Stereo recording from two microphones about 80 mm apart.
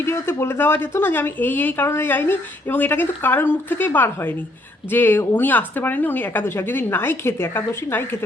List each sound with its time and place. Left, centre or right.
0.0 s speech: left